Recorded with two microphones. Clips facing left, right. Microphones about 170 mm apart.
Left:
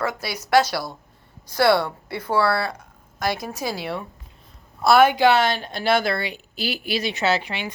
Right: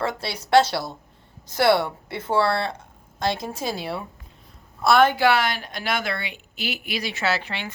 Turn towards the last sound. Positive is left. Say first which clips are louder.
# left 3 dB
turn(degrees=15)  # may be behind; listen again after turning